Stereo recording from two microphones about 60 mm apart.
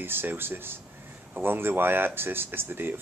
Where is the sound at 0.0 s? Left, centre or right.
Right.